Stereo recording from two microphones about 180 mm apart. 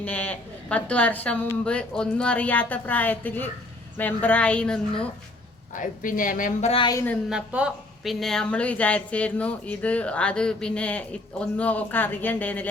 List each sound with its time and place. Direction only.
0.0 s a woman's voice: 10° left (ahead or behind)
5.7 s a woman's voice: 50° left (ahead or behind); by 6.9 s 30° left (ahead or behind)
6.9 s a woman's voice: 10° left (ahead or behind)
7.3 s a woman's voice: 5° right (ahead or behind)